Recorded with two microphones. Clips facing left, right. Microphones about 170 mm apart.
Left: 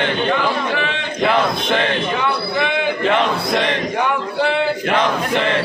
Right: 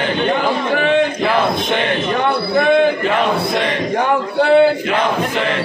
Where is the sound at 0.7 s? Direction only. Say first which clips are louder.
Right 9 dB; 45° right (ahead or behind).